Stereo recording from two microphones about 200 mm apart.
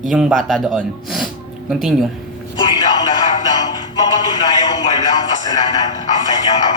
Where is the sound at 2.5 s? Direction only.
25° left (ahead or behind).